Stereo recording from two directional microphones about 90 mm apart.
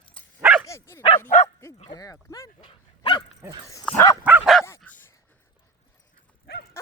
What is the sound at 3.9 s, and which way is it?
Bow-wow, 35° left (ahead or behind).